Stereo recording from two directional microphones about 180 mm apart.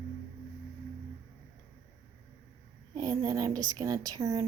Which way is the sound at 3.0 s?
20° right (ahead or behind).